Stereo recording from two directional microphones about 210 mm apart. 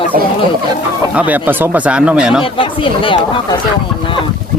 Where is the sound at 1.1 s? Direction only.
10° right (ahead or behind).